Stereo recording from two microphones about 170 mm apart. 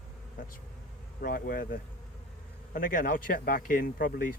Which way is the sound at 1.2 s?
55° left (ahead or behind).